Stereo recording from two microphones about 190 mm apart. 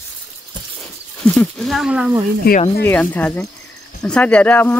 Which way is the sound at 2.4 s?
55° left (ahead or behind).